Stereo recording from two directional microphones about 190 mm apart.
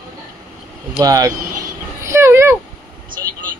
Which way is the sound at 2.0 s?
15° right (ahead or behind).